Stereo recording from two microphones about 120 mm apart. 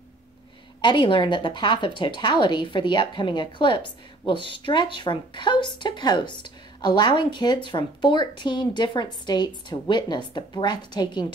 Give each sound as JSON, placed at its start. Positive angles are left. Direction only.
{"t": 0.7, "sound": "speech", "side_deg": 40}